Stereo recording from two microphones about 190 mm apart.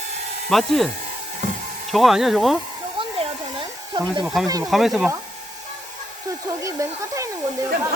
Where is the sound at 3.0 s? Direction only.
25° right (ahead or behind).